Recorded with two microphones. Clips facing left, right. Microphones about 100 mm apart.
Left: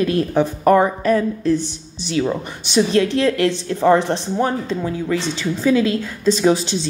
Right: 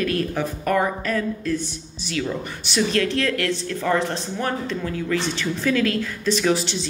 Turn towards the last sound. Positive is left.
turn(degrees=25)  # may be behind; listen again after turning